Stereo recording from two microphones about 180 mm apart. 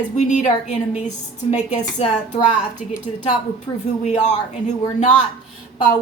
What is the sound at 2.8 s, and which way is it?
Speech, 5° right (ahead or behind).